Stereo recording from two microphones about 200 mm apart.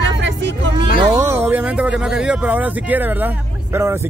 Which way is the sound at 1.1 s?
15° right (ahead or behind).